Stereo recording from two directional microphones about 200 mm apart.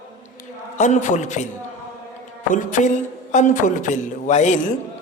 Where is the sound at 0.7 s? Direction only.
35° left (ahead or behind).